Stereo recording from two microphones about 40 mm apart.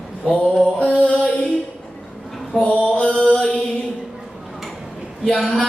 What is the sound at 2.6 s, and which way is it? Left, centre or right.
Mantra, left.